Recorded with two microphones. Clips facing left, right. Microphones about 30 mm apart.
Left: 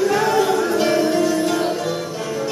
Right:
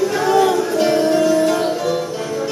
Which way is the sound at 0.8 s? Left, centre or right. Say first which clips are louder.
Right 4 dB; centre.